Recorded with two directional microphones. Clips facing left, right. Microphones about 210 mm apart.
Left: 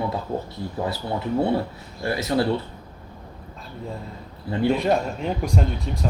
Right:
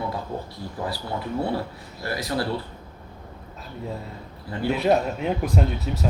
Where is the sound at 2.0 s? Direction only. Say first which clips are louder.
Left 5 dB; 25° left (ahead or behind).